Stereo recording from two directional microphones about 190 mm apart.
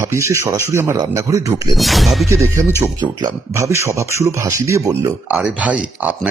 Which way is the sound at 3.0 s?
20° right (ahead or behind).